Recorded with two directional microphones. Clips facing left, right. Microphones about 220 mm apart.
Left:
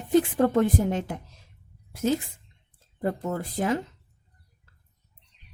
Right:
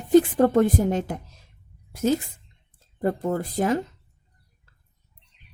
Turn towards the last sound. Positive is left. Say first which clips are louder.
# right 3 dB
turn(degrees=-40)  # may be behind; listen again after turning